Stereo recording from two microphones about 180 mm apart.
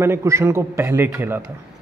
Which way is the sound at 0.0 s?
15° right (ahead or behind).